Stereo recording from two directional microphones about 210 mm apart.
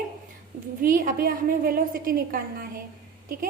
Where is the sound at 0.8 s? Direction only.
40° right (ahead or behind).